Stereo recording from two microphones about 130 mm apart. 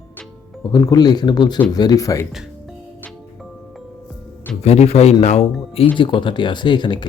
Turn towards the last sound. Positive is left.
turn(degrees=35)  # may be behind; listen again after turning